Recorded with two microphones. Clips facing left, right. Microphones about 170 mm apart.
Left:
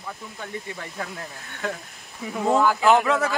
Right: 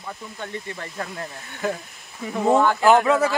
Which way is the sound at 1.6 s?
5° right (ahead or behind).